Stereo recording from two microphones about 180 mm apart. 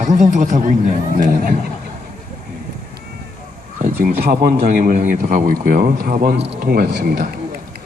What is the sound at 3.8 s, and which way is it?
Speech, 45° right (ahead or behind).